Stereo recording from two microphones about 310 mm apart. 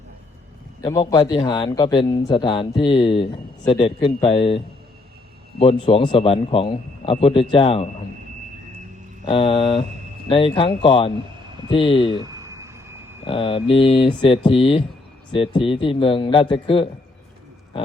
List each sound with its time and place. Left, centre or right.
0.8 s speech: centre
5.8 s speech: centre
9.2 s speech: centre
12.1 s a sound: centre
13.2 s speech: centre